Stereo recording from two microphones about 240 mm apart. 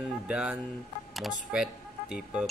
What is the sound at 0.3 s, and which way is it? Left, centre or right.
Speech, centre.